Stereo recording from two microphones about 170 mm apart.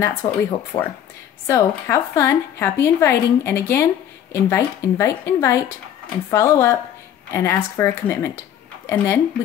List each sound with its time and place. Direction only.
0.0 s speech: 10° left (ahead or behind)